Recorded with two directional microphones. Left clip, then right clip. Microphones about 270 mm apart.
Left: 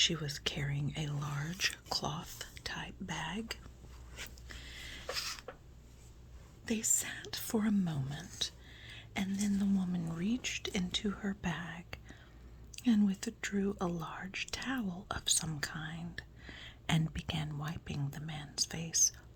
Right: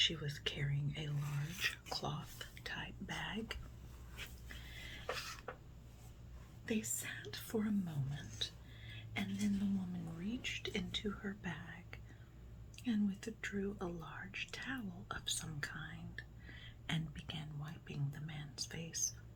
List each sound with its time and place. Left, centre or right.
0.0 s speech: left
4.4 s dog: left
6.7 s speech: left